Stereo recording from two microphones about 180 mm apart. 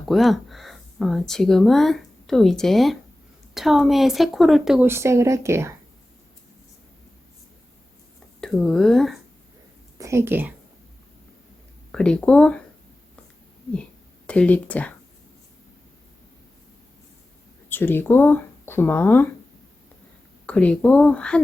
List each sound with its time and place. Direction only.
0.1 s speech: centre (ahead or behind)
4.9 s speech: 15° right (ahead or behind)
8.4 s speech: 5° left (ahead or behind)
10.0 s speech: 15° right (ahead or behind)
11.9 s speech: 5° left (ahead or behind)
14.3 s speech: 5° left (ahead or behind)
17.7 s speech: 10° left (ahead or behind)
20.5 s speech: 5° left (ahead or behind)